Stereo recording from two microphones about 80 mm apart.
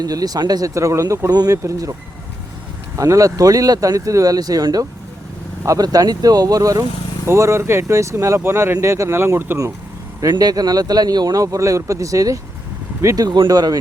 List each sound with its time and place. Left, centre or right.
0.0 s speech: right
0.7 s speech: right
1.3 s speech: right
1.6 s speech: right
7.3 s speech: right
10.2 s speech: right
13.1 s speech: right